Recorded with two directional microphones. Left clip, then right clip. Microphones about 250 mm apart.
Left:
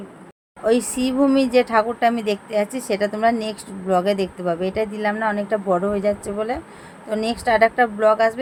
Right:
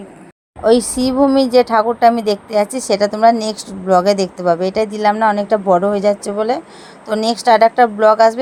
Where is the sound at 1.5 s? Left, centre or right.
Centre.